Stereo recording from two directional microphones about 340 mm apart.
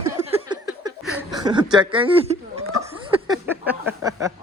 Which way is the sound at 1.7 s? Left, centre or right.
Centre.